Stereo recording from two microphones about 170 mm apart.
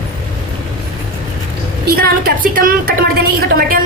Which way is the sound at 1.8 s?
60° right (ahead or behind).